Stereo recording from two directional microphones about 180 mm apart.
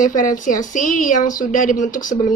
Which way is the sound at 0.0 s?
45° left (ahead or behind).